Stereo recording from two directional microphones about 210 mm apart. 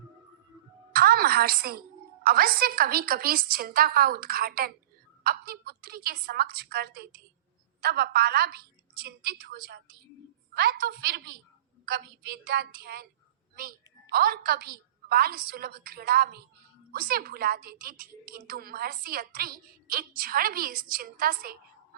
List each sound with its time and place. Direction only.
0.9 s a woman's voice: 45° right (ahead or behind)